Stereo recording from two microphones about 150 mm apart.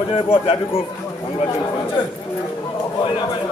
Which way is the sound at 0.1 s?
35° left (ahead or behind).